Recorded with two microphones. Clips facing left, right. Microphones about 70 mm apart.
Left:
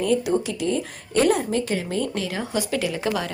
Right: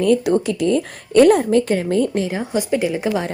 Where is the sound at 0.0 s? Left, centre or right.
Right.